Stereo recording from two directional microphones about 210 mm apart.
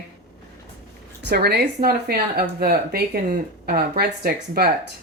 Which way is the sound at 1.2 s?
50° right (ahead or behind).